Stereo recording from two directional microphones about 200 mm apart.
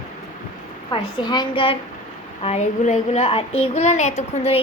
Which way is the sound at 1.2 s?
20° left (ahead or behind).